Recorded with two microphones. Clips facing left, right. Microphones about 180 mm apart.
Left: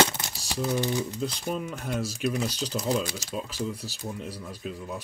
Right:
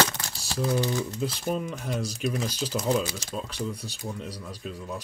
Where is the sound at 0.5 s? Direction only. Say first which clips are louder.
Right 1 dB; 10° left (ahead or behind).